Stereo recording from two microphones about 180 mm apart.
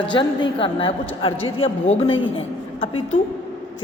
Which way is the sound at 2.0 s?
90° left.